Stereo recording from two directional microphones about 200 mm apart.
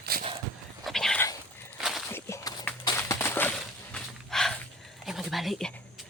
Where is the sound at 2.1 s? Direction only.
15° left (ahead or behind).